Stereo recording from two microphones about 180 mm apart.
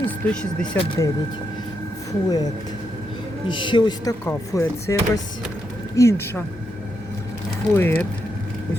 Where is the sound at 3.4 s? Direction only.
25° left (ahead or behind).